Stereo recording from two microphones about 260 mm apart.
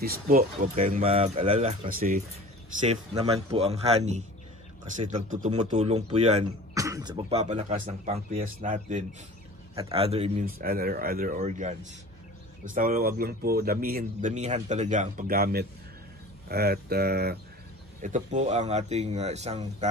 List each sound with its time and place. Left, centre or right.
0.0 s speech: right
2.9 s speech: right
6.7 s speech: centre